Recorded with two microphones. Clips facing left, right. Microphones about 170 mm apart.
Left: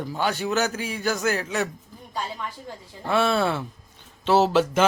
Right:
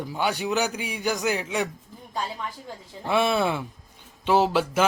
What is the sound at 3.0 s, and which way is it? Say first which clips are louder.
A man's voice: left 1 dB; 15° right (ahead or behind).